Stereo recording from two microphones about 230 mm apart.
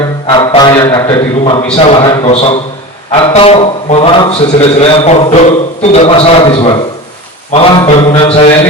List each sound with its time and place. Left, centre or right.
0.3 s a man's voice: centre